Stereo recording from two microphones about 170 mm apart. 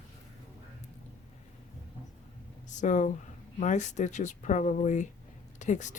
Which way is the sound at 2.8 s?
45° left (ahead or behind).